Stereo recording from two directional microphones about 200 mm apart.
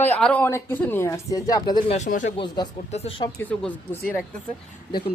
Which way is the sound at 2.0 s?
40° left (ahead or behind).